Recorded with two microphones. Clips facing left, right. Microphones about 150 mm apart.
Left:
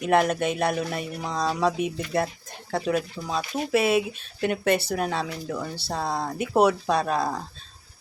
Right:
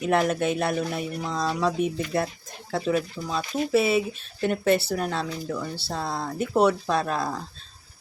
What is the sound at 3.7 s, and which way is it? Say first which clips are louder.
Speech: even; centre (ahead or behind).